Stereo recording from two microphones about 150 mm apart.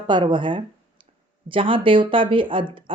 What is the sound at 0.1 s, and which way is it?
Speech, 30° right (ahead or behind).